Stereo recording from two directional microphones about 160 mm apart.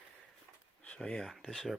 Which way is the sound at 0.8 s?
5° left (ahead or behind).